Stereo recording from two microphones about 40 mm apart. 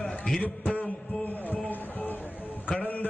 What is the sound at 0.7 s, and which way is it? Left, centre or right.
Music, left.